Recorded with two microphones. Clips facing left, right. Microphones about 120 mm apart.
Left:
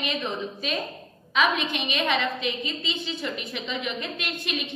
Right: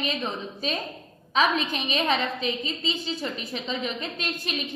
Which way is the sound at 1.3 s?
35° right (ahead or behind).